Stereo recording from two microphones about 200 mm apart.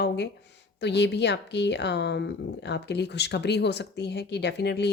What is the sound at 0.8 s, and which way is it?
Speech, 60° left (ahead or behind).